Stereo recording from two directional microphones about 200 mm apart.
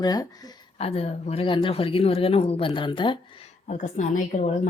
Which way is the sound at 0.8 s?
30° left (ahead or behind).